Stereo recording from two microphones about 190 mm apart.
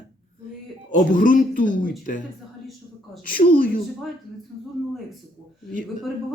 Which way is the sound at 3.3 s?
50° left (ahead or behind).